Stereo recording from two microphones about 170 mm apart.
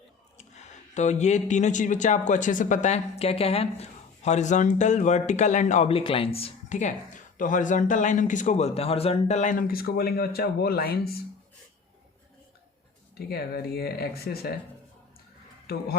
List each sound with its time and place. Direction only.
0.9 s speech: 45° left (ahead or behind); by 11.2 s 65° left (ahead or behind)
13.1 s speech: 65° left (ahead or behind)
15.7 s speech: 65° left (ahead or behind)